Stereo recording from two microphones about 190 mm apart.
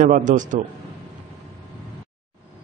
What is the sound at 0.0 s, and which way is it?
Speech, 40° right (ahead or behind).